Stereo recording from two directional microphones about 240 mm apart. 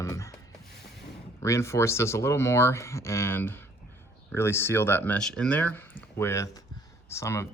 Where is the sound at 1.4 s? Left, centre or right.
Centre.